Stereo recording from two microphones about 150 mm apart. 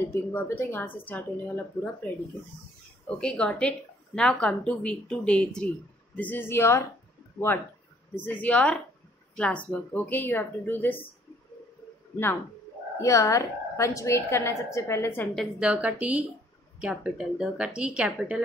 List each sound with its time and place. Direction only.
0.1 s a woman's voice: 15° left (ahead or behind)
3.1 s a woman's voice: 5° left (ahead or behind)
13.0 s a woman's voice: 20° left (ahead or behind)
15.3 s a woman's voice: 5° right (ahead or behind)